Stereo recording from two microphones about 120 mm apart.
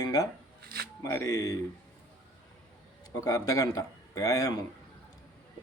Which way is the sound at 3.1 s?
30° left (ahead or behind).